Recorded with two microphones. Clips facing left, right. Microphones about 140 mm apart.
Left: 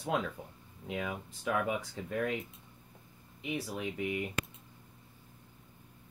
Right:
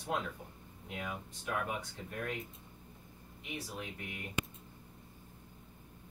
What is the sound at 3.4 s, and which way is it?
Speech, 90° left.